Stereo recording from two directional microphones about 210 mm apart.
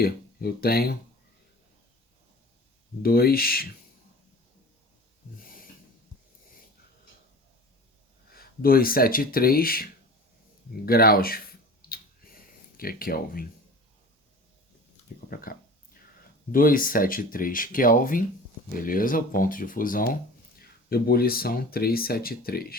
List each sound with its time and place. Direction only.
0.0 s speech: 45° left (ahead or behind)
3.0 s speech: 45° left (ahead or behind)
8.3 s speech: 45° left (ahead or behind)
10.8 s a sound: 45° left (ahead or behind)
15.3 s a sound: 45° left (ahead or behind)
16.5 s speech: 40° left (ahead or behind)